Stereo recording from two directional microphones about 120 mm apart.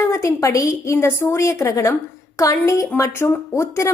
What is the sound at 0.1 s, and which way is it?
A woman's voice, 25° left (ahead or behind).